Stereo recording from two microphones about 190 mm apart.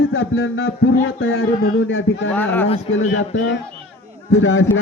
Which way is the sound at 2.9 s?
85° left.